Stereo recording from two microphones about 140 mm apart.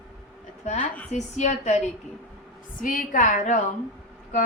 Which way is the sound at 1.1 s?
55° left (ahead or behind).